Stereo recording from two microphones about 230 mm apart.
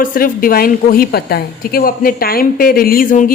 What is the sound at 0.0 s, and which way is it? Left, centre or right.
Speech, left.